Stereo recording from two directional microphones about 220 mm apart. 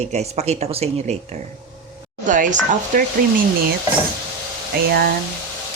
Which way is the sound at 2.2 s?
35° right (ahead or behind).